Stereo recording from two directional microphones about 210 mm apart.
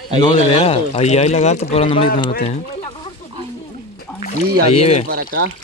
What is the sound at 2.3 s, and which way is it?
Speech, 35° left (ahead or behind).